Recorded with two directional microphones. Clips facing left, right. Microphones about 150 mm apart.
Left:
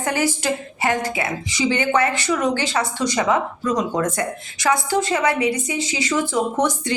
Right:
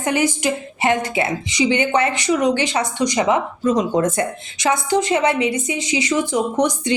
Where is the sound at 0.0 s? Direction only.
20° right (ahead or behind).